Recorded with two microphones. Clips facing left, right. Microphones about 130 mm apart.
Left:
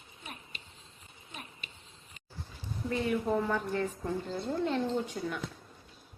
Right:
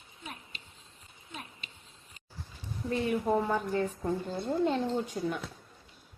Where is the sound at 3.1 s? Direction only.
25° right (ahead or behind).